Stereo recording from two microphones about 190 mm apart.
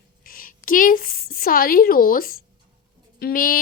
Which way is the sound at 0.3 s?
50° left (ahead or behind).